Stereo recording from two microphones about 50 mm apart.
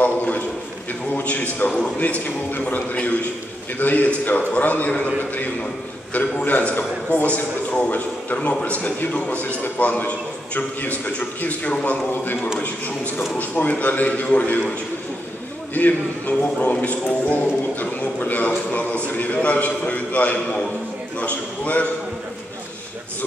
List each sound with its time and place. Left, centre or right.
0.0 s a sound: left
1.1 s a man's voice: left
15.7 s a man's voice: left